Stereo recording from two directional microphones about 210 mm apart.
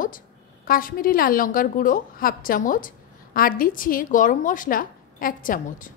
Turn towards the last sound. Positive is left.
turn(degrees=40)  # may be behind; listen again after turning